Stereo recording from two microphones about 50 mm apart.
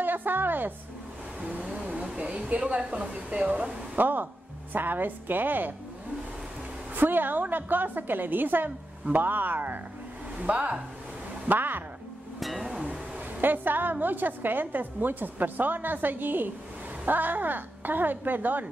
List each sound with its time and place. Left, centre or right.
0.0 s a woman's voice: right
1.4 s a woman's voice: right
7.0 s a woman's voice: right
11.4 s a woman's voice: right
12.4 s music: centre
12.6 s a sound: centre
13.4 s a woman's voice: right